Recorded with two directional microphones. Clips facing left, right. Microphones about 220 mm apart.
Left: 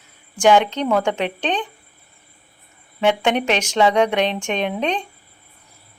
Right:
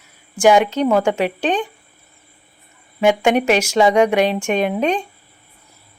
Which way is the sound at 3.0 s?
10° right (ahead or behind).